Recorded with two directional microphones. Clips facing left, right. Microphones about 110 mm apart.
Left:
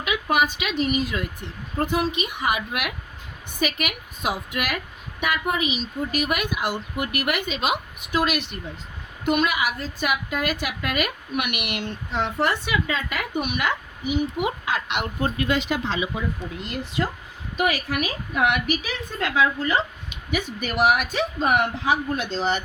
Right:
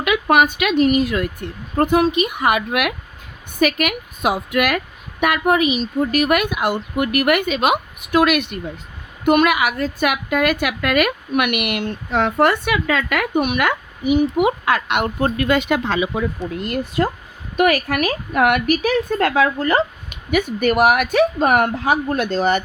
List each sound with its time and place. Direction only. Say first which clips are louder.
0.0 s a woman's voice: right 7 dB; 60° right (ahead or behind)